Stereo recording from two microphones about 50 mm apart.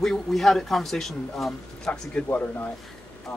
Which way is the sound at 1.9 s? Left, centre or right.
Left.